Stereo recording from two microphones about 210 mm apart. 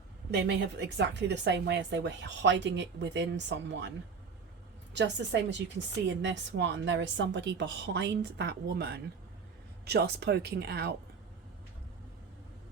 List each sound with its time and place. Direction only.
0.3 s a woman's voice: 55° right (ahead or behind)
4.9 s a woman's voice: 55° right (ahead or behind)